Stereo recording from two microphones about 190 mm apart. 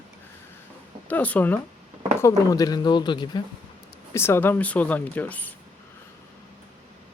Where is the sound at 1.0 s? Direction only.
10° left (ahead or behind).